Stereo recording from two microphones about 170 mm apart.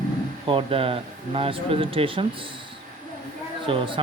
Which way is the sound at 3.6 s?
30° right (ahead or behind).